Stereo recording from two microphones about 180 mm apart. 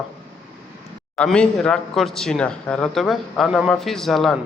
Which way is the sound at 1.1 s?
5° left (ahead or behind).